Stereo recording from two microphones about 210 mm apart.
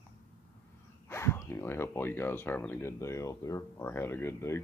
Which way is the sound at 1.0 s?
10° left (ahead or behind).